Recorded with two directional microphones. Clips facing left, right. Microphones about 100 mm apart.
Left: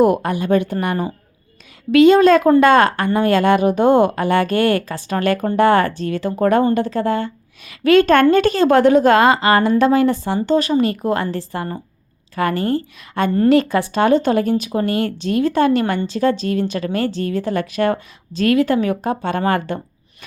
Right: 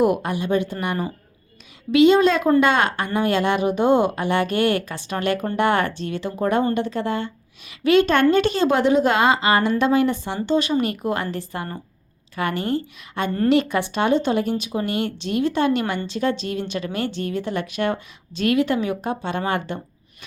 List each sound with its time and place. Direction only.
0.0 s a woman's voice: 45° left (ahead or behind)
6.7 s a woman's voice: 40° left (ahead or behind)